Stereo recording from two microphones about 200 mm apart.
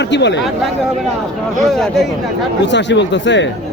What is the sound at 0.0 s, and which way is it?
Speech, 60° left (ahead or behind).